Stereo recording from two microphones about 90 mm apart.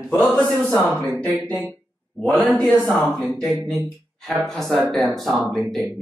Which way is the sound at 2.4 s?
15° left (ahead or behind).